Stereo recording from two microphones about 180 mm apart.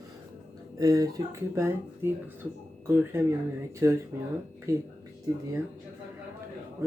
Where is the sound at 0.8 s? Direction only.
20° right (ahead or behind).